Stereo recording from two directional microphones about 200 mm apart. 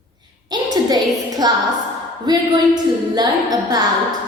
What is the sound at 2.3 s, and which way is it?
Speech, 20° right (ahead or behind).